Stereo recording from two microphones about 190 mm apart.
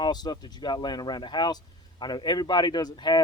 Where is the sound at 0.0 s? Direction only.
20° left (ahead or behind).